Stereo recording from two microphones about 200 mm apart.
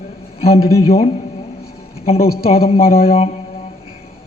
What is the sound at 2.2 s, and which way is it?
Speech, 50° left (ahead or behind).